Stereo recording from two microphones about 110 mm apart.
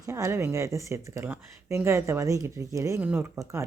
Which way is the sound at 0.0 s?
30° right (ahead or behind).